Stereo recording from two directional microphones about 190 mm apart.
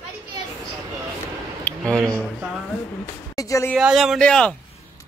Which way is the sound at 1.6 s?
5° left (ahead or behind).